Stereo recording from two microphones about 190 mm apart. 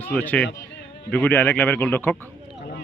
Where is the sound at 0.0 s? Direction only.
10° left (ahead or behind).